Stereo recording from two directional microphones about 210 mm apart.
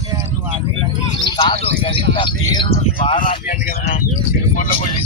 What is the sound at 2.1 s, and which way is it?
Speech, 20° left (ahead or behind).